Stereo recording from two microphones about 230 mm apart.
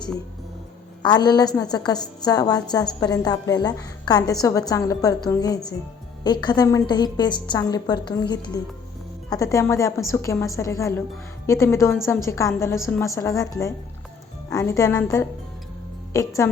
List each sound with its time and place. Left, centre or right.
1.0 s a woman's voice: centre